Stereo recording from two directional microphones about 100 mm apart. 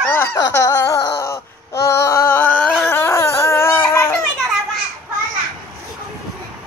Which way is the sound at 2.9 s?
25° left (ahead or behind).